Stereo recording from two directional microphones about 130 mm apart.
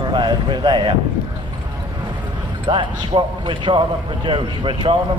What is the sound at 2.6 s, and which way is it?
A man's voice, 40° right (ahead or behind).